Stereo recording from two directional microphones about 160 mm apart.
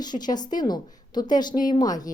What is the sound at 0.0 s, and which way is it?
Speech, 25° left (ahead or behind).